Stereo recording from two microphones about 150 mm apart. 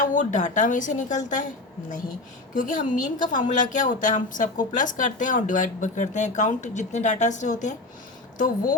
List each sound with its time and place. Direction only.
0.0 s a woman's voice: 55° left (ahead or behind)